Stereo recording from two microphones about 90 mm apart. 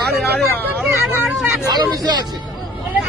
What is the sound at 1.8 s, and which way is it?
Speech, 50° right (ahead or behind).